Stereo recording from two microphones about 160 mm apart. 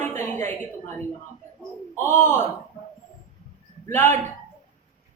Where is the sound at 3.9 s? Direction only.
15° left (ahead or behind).